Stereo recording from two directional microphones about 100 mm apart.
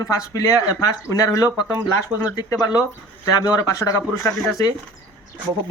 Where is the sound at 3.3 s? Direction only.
40° left (ahead or behind).